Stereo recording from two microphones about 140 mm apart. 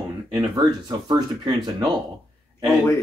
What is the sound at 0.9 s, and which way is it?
Speech, 30° right (ahead or behind).